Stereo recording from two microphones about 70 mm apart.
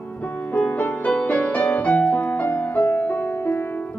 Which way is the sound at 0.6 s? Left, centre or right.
Left.